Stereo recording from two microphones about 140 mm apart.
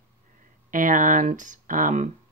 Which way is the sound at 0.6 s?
70° right (ahead or behind).